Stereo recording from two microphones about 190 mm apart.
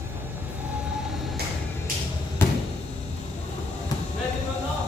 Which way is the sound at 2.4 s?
10° left (ahead or behind).